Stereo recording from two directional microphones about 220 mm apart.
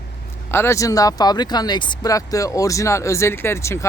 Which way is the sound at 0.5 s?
10° left (ahead or behind).